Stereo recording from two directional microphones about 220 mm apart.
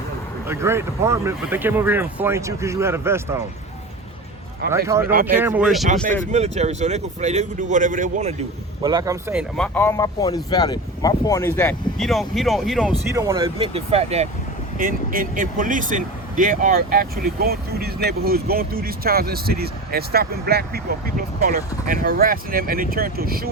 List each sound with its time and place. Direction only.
0.4 s speech: 10° right (ahead or behind)
4.6 s speech: 45° right (ahead or behind)
5.2 s speech: 10° right (ahead or behind)
6.3 s speech: 30° right (ahead or behind)
8.8 s speech: 15° right (ahead or behind)
9.6 s speech: 10° left (ahead or behind)
13.1 s speech: 15° right (ahead or behind)
14.8 s speech: 40° right (ahead or behind)